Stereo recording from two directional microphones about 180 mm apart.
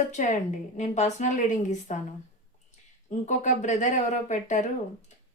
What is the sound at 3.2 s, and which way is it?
Speech, 40° left (ahead or behind).